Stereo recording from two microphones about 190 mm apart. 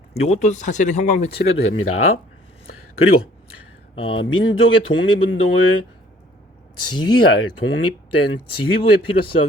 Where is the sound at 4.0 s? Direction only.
90° left.